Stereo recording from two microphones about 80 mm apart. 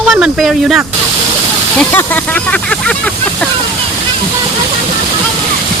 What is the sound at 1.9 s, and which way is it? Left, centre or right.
Speech, left.